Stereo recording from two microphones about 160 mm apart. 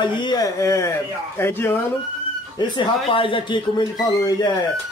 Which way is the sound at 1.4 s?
15° left (ahead or behind).